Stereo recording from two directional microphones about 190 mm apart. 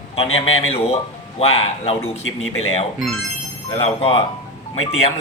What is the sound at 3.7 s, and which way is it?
Speech, 30° left (ahead or behind).